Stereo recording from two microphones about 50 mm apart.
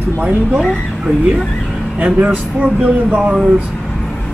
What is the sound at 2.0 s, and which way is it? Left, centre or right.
Speech, right.